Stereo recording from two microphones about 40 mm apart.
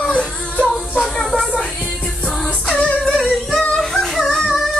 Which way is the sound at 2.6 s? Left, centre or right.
Centre.